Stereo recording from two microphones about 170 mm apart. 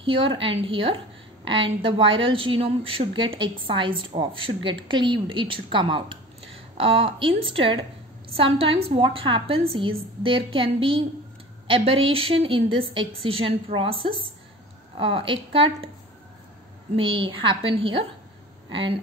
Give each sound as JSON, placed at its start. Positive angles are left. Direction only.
{"t": 0.0, "sound": "a woman's voice", "side_deg": -30}
{"t": 16.9, "sound": "a woman's voice", "side_deg": -30}